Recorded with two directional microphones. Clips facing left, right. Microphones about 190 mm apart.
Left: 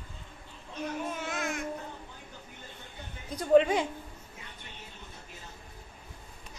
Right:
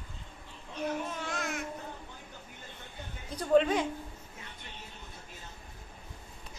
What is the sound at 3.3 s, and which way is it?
Speech, 10° left (ahead or behind).